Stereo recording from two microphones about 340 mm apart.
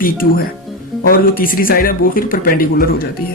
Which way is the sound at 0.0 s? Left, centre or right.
Left.